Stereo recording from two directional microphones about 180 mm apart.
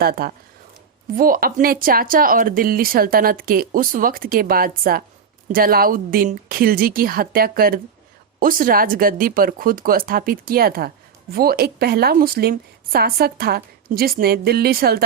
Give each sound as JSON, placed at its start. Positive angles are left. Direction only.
{"t": 0.0, "sound": "speech", "side_deg": -55}